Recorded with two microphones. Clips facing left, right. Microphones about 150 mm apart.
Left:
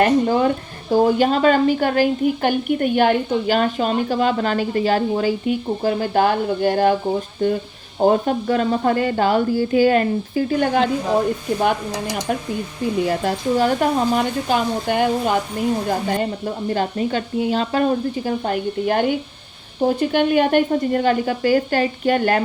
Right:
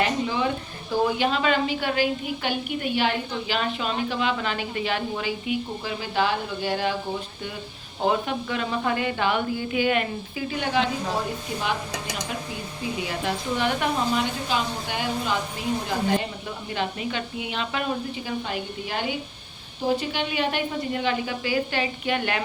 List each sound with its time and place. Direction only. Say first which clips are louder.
0.0 s speech: left 8 dB; 50° left (ahead or behind)